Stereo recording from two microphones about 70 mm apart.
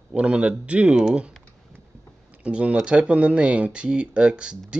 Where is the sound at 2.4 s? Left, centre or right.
Centre.